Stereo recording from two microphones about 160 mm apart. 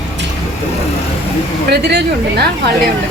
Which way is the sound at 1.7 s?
90° right.